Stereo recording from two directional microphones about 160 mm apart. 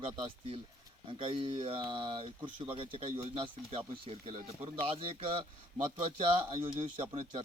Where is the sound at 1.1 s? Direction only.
35° right (ahead or behind).